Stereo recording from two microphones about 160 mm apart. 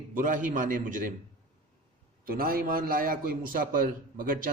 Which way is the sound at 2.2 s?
65° right (ahead or behind).